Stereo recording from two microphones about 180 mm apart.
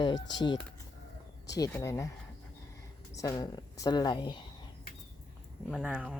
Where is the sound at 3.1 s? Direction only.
20° left (ahead or behind).